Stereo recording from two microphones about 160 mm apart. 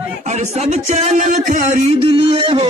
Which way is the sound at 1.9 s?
35° right (ahead or behind).